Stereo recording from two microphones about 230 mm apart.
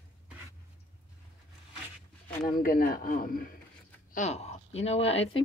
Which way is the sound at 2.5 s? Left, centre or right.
Left.